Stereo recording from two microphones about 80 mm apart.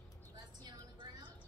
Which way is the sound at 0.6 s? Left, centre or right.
Right.